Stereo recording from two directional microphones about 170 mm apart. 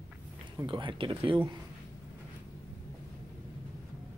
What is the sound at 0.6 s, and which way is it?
Speech, 30° right (ahead or behind).